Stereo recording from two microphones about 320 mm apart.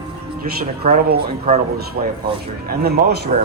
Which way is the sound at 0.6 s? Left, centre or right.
Right.